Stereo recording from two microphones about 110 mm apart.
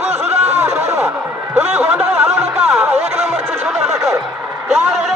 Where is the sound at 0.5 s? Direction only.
25° right (ahead or behind).